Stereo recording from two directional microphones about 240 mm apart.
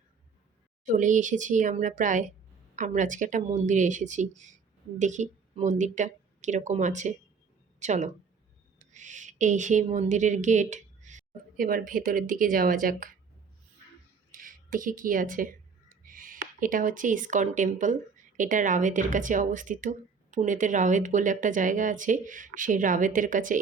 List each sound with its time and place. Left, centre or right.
0.9 s a woman's voice: right
14.3 s a woman's voice: right